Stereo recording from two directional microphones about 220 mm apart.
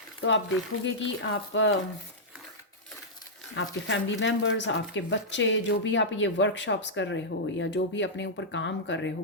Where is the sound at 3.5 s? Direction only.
55° left (ahead or behind).